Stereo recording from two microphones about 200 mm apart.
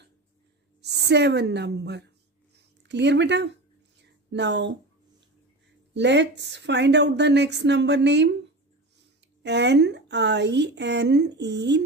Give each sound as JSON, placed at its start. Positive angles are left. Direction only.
{"t": 0.8, "sound": "a woman's voice", "side_deg": -55}
{"t": 4.0, "sound": "a sound", "side_deg": -60}
{"t": 5.9, "sound": "a woman's voice", "side_deg": -60}
{"t": 9.4, "sound": "a woman's voice", "side_deg": -60}